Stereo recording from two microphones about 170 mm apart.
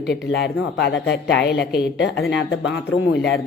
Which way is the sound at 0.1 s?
90° left.